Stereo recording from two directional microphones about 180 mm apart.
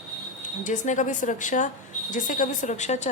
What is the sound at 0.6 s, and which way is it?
A woman's voice, 45° left (ahead or behind).